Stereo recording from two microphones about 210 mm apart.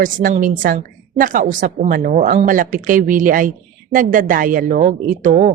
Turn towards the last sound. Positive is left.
turn(degrees=-40)  # may be behind; listen again after turning